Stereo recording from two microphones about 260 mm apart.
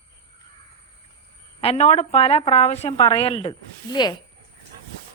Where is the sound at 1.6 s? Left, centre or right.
Left.